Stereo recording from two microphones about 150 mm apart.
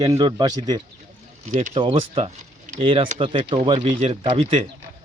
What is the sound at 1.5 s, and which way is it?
Speech, 55° right (ahead or behind).